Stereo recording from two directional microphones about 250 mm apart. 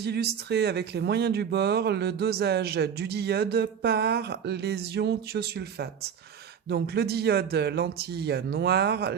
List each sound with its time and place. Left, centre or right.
0.0 s speech: right